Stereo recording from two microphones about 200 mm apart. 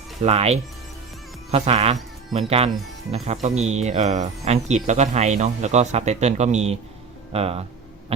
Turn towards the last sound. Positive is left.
turn(degrees=-30)  # may be behind; listen again after turning